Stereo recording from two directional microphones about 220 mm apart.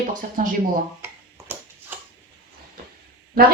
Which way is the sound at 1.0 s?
10° right (ahead or behind).